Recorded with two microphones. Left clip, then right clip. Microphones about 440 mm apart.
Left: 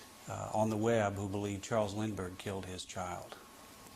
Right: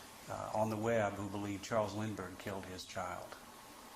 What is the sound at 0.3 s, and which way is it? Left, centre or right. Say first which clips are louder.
Speech: left 2 dB; left.